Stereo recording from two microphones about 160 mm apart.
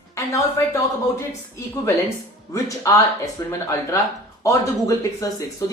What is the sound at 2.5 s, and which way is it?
Speech, 20° left (ahead or behind).